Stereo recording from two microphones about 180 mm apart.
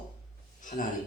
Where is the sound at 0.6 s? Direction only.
45° left (ahead or behind).